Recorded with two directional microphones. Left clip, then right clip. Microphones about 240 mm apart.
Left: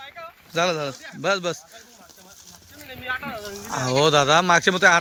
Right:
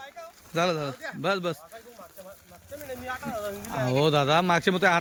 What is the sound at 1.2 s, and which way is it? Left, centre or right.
Speech, centre.